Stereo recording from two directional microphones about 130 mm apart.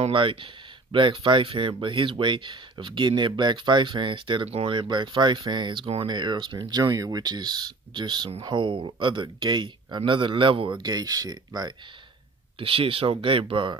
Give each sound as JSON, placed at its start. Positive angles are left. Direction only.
{"t": 0.1, "sound": "speech", "side_deg": -40}
{"t": 12.5, "sound": "speech", "side_deg": -45}